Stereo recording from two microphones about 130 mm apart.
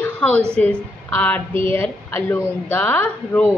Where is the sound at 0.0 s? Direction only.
15° left (ahead or behind).